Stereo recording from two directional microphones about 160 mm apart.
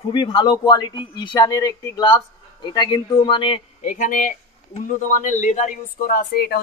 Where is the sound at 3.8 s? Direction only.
55° left (ahead or behind).